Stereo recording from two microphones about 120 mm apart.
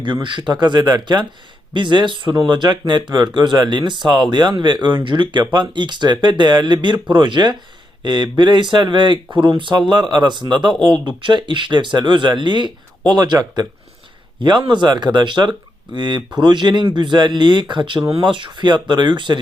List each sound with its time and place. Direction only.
0.0 s speech: 40° right (ahead or behind)